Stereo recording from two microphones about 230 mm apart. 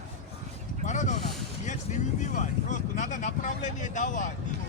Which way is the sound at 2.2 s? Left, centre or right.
Left.